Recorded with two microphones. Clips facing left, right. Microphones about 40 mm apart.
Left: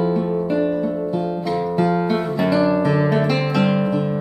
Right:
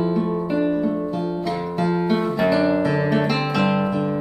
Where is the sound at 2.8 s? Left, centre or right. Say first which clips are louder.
Left 2 dB; centre.